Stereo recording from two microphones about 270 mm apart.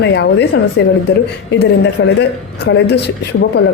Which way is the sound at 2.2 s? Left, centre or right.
Left.